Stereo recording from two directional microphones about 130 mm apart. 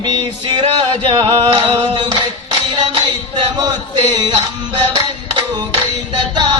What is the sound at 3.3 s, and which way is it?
Speech, 35° right (ahead or behind).